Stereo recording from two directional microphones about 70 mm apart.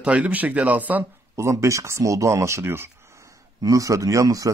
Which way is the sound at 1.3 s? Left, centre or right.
Right.